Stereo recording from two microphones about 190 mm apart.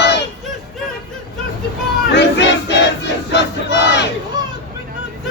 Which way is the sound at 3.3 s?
65° left (ahead or behind).